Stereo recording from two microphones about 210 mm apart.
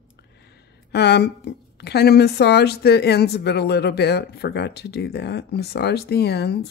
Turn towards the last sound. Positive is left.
turn(degrees=50)  # may be behind; listen again after turning